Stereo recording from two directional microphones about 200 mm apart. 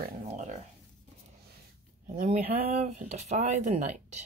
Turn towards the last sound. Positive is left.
turn(degrees=-35)  # may be behind; listen again after turning